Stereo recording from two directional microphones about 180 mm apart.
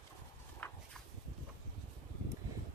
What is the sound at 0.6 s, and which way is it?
Walk, 10° left (ahead or behind).